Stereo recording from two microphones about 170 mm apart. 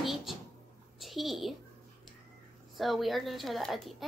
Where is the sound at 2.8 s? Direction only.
Centre (ahead or behind).